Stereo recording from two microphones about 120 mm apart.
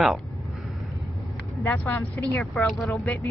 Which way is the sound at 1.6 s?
20° left (ahead or behind).